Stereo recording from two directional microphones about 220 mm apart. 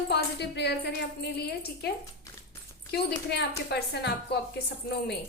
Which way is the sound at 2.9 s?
50° left (ahead or behind).